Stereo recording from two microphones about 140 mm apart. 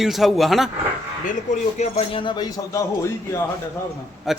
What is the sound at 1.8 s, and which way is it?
Speech, 45° left (ahead or behind).